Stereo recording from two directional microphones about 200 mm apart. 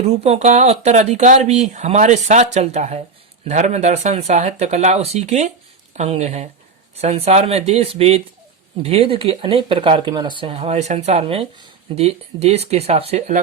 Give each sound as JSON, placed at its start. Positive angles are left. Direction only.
{"t": 0.1, "sound": "speech", "side_deg": -30}